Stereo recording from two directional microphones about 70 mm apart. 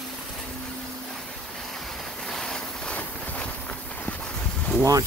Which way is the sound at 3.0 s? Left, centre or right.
Left.